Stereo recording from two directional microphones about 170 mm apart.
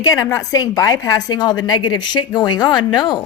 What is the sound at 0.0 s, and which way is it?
Speech, 20° left (ahead or behind).